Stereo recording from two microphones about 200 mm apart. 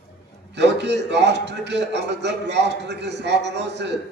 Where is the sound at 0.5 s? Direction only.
60° right (ahead or behind).